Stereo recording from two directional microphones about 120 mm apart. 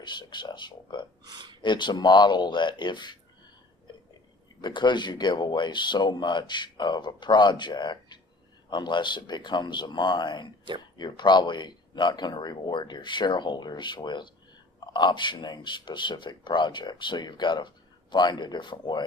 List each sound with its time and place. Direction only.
0.0 s speech: 40° left (ahead or behind)
1.2 s speech: 35° right (ahead or behind)
1.6 s speech: 40° left (ahead or behind)
4.6 s speech: 40° left (ahead or behind)